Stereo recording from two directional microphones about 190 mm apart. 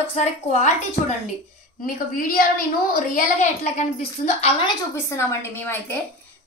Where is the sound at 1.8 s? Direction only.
50° left (ahead or behind).